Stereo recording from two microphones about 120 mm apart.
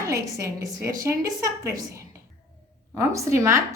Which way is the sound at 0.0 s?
25° right (ahead or behind).